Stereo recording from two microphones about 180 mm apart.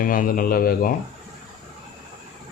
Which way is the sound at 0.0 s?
50° left (ahead or behind).